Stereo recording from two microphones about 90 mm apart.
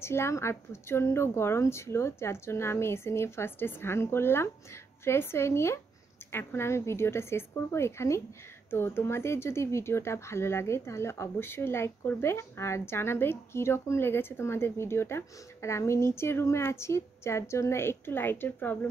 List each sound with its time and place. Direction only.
0.0 s speech: 30° left (ahead or behind)